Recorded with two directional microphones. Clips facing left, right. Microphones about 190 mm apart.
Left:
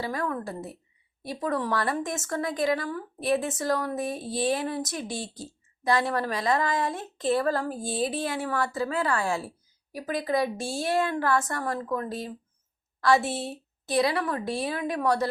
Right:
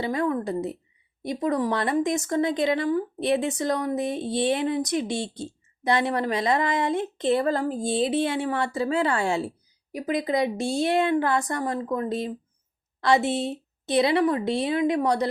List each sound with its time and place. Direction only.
0.0 s speech: 20° right (ahead or behind)